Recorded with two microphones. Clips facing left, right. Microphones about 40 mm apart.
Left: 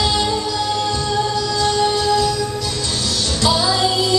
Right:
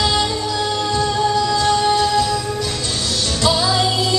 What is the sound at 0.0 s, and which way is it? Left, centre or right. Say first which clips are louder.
Music: even; centre.